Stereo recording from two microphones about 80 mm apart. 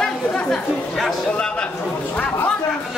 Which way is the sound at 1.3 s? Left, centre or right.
Centre.